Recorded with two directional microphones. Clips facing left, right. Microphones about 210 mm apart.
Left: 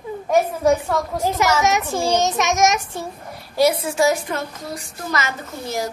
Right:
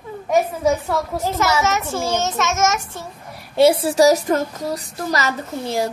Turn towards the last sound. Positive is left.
turn(degrees=-30)  # may be behind; listen again after turning